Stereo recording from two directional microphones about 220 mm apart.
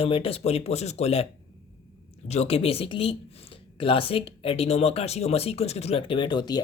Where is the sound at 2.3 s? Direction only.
30° left (ahead or behind).